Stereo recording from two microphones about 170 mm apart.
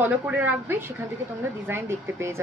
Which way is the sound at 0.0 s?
10° right (ahead or behind).